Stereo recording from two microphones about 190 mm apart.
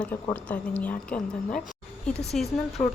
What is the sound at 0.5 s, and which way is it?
Speech, 10° left (ahead or behind).